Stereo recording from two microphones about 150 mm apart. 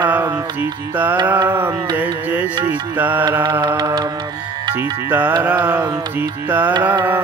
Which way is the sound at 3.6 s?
25° right (ahead or behind).